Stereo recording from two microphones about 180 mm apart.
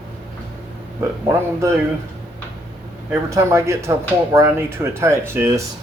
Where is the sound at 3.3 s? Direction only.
15° right (ahead or behind).